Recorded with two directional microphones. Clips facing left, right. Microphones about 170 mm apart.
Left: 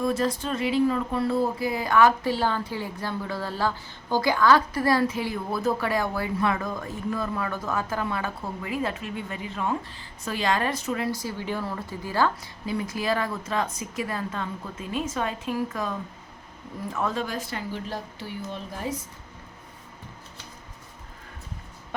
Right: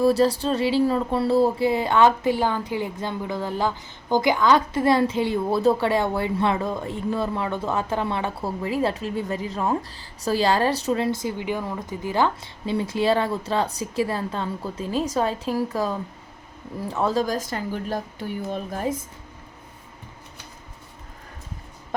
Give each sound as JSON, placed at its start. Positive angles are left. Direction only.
{"t": 0.0, "sound": "a woman's voice", "side_deg": -35}